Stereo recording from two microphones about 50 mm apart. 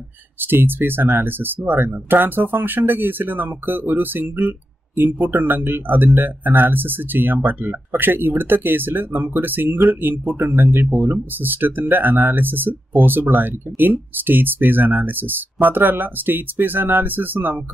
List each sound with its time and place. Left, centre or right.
0.4 s speech: right